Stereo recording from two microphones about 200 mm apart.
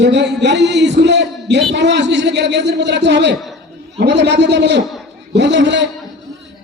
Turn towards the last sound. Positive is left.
turn(degrees=-60)  # may be behind; listen again after turning